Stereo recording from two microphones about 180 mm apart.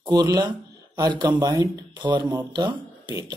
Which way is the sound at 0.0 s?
20° right (ahead or behind).